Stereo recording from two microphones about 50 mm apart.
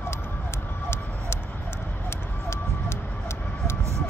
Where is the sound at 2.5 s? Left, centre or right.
Left.